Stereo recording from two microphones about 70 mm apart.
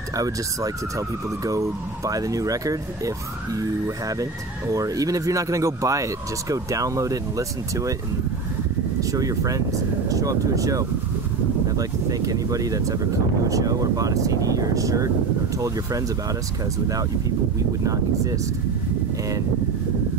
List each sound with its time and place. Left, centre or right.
0.1 s speech: right
9.1 s speech: right
17.8 s speech: right